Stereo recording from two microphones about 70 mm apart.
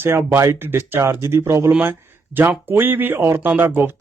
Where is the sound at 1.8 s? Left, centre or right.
Right.